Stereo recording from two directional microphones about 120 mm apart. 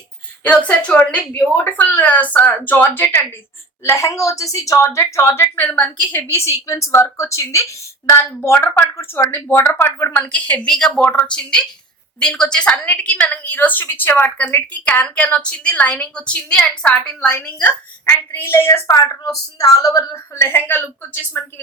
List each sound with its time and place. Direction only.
0.4 s a woman's voice: 10° left (ahead or behind)
6.1 s a woman's voice: 20° left (ahead or behind)